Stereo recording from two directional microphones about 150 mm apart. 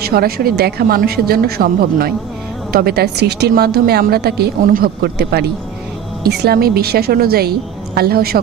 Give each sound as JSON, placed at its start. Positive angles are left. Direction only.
{"t": 0.0, "sound": "a woman's voice", "side_deg": -90}